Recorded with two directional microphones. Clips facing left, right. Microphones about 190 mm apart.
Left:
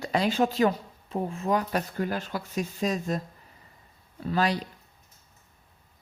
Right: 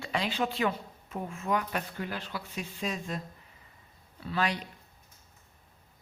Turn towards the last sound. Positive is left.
turn(degrees=35)  # may be behind; listen again after turning